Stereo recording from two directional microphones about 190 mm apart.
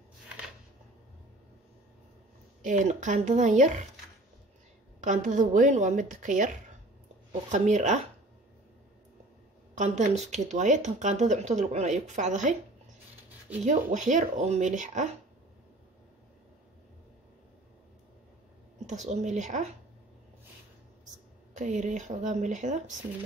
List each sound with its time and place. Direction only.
2.6 s speech: 40° right (ahead or behind)
5.0 s speech: 40° right (ahead or behind)
9.8 s speech: 35° right (ahead or behind)
13.7 s speech: 40° right (ahead or behind)
18.9 s speech: 40° right (ahead or behind)
21.5 s speech: 40° right (ahead or behind)